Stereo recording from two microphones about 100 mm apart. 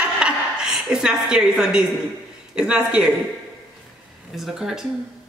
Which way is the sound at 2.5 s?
10° right (ahead or behind).